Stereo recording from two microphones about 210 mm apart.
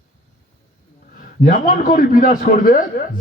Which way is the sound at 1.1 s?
40° left (ahead or behind).